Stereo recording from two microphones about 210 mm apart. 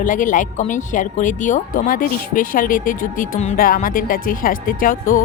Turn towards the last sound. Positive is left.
turn(degrees=40)  # may be behind; listen again after turning